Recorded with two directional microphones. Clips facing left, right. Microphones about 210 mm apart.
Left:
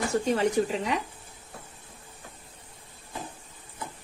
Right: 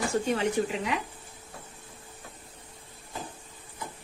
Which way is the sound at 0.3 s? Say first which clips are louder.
Left 2 dB; 40° left (ahead or behind).